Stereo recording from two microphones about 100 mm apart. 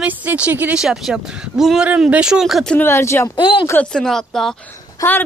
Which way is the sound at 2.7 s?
25° left (ahead or behind).